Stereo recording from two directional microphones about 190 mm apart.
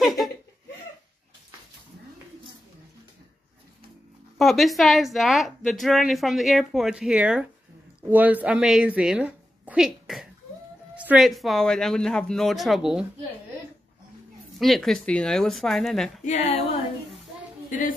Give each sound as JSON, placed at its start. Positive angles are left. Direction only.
{"t": 0.0, "sound": "laughter", "side_deg": 0}
{"t": 4.4, "sound": "speech", "side_deg": 0}
{"t": 14.6, "sound": "speech", "side_deg": 0}
{"t": 16.3, "sound": "speech", "side_deg": 35}
{"t": 17.6, "sound": "a woman's voice", "side_deg": 45}